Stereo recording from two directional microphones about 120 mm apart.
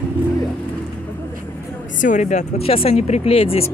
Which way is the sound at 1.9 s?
90° left.